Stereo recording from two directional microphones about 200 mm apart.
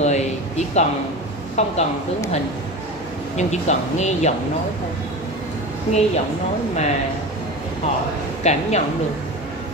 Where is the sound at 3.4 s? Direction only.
35° left (ahead or behind).